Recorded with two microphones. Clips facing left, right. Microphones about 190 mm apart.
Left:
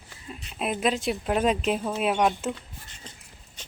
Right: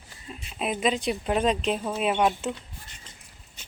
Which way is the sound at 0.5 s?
Centre (ahead or behind).